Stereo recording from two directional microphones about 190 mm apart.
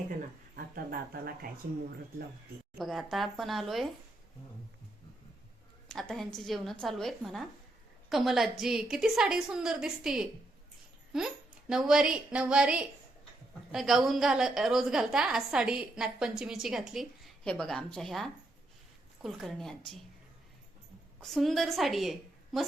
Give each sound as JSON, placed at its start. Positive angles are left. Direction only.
{"t": 0.5, "sound": "speech", "side_deg": -50}
{"t": 2.7, "sound": "a woman's voice", "side_deg": 0}
{"t": 5.9, "sound": "a woman's voice", "side_deg": 0}
{"t": 21.2, "sound": "a woman's voice", "side_deg": 0}